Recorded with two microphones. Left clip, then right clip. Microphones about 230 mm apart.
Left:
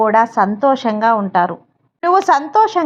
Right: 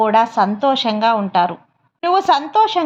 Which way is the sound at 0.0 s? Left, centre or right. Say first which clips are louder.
Left 1 dB; left.